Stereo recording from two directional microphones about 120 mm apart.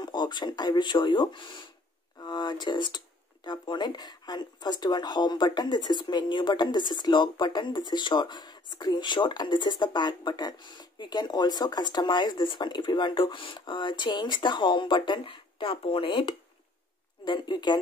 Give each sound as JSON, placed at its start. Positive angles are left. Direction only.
{"t": 0.0, "sound": "speech", "side_deg": 40}